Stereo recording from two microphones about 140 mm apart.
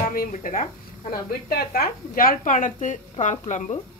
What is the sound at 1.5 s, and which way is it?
A woman's voice, 90° left.